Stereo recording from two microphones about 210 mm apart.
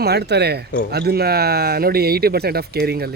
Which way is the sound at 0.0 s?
50° right (ahead or behind).